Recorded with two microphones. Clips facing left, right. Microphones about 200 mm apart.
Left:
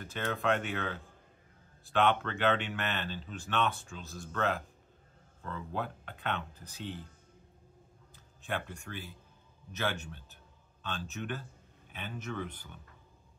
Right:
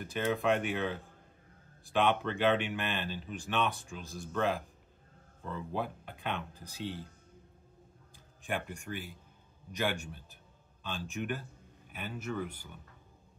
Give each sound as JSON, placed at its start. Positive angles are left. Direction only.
{"t": 0.0, "sound": "speech", "side_deg": -10}
{"t": 8.5, "sound": "speech", "side_deg": -15}